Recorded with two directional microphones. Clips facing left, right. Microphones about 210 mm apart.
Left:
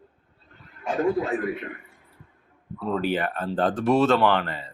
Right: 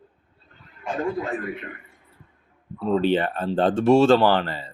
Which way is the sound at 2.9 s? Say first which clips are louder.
Right 5 dB; 25° right (ahead or behind).